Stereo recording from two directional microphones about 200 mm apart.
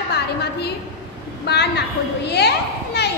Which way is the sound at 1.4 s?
55° left (ahead or behind).